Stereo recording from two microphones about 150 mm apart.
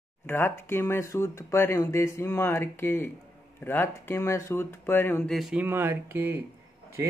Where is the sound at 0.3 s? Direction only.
15° left (ahead or behind).